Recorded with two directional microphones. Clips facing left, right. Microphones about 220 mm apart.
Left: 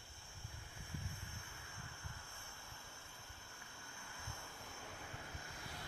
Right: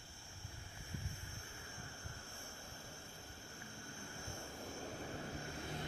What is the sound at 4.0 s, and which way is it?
Vehicle, 40° right (ahead or behind).